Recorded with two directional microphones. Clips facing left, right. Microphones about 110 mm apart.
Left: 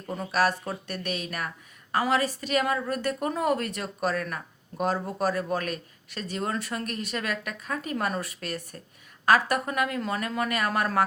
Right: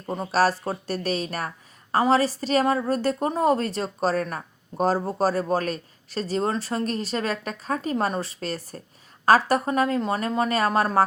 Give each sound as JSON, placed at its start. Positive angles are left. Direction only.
{"t": 0.0, "sound": "a woman's voice", "side_deg": -25}